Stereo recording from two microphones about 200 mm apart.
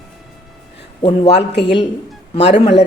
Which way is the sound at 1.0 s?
30° left (ahead or behind).